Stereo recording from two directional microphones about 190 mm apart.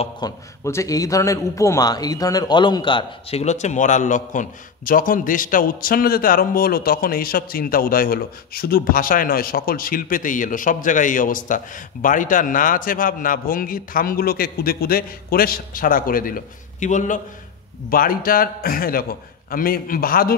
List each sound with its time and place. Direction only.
0.2 s a man's voice: 20° left (ahead or behind); by 20.3 s 50° left (ahead or behind)